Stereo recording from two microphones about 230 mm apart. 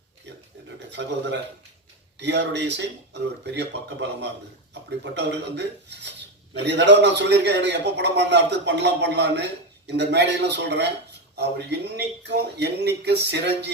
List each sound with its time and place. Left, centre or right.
0.9 s speech: right